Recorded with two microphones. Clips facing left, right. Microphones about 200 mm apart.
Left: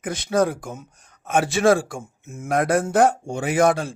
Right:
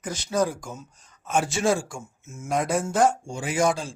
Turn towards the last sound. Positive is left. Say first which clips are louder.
# left 5 dB
turn(degrees=60)  # may be behind; listen again after turning